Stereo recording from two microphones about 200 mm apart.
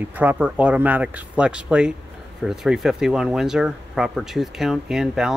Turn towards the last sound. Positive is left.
turn(degrees=0)  # may be behind; listen again after turning